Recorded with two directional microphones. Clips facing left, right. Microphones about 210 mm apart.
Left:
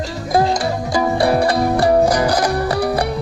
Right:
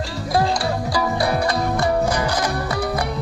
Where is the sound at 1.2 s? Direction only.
30° left (ahead or behind).